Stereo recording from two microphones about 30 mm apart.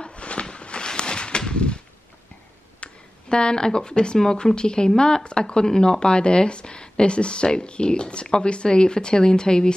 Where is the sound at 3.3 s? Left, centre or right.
Left.